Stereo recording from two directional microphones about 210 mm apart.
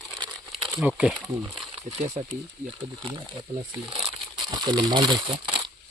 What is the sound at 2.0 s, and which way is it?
Speech, 30° right (ahead or behind).